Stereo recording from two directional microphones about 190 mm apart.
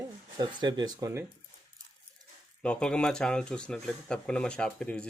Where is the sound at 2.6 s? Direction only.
5° left (ahead or behind).